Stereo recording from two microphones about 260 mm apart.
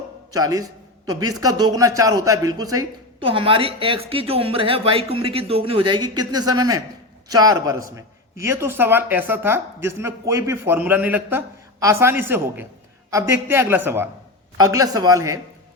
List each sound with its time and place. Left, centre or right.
0.3 s a man's voice: centre